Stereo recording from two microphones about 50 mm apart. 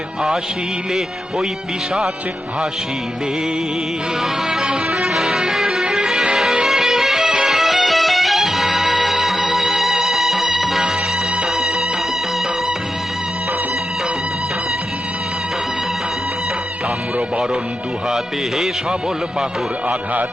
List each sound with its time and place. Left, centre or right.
4.6 s music: centre
5.0 s music: centre
17.2 s speech: right
18.1 s speech: centre